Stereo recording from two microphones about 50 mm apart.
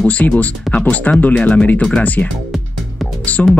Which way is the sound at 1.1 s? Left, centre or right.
Left.